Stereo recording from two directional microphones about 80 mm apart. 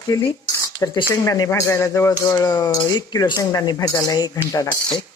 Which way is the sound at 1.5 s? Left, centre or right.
Left.